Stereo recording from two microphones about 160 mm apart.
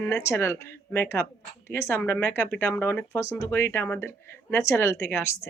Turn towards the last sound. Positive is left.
turn(degrees=15)  # may be behind; listen again after turning